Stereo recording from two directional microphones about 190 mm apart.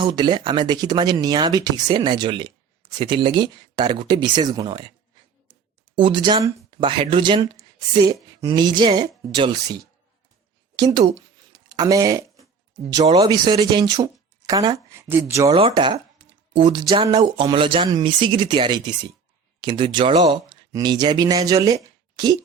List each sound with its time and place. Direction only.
0.0 s speech: 25° right (ahead or behind)
6.0 s speech: 25° right (ahead or behind)
10.8 s a sound: 20° right (ahead or behind)
12.9 s speech: 20° right (ahead or behind)
15.5 s speech: 25° right (ahead or behind)
22.1 s a sound: 20° right (ahead or behind)